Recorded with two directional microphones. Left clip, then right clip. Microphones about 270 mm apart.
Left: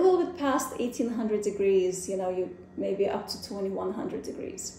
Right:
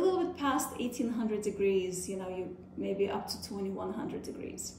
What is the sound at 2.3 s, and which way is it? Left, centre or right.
A woman's voice, centre.